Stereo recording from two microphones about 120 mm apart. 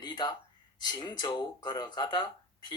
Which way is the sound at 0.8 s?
35° left (ahead or behind).